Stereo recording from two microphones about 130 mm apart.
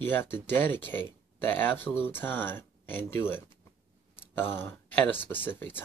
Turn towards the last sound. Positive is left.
turn(degrees=15)  # may be behind; listen again after turning